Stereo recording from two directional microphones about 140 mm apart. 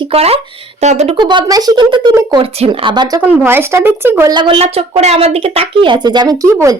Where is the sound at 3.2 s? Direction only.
15° right (ahead or behind).